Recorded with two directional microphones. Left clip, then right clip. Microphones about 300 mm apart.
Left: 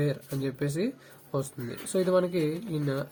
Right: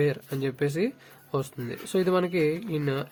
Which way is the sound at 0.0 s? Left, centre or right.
Right.